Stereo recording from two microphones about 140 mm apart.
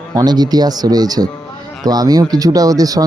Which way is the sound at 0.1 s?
25° right (ahead or behind).